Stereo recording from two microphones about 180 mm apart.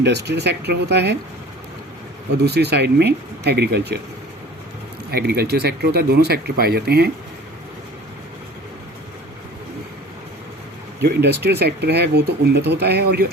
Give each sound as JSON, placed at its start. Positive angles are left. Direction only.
{"t": 0.0, "sound": "speech", "side_deg": -70}
{"t": 2.4, "sound": "speech", "side_deg": -65}
{"t": 5.1, "sound": "speech", "side_deg": -65}
{"t": 11.0, "sound": "speech", "side_deg": -65}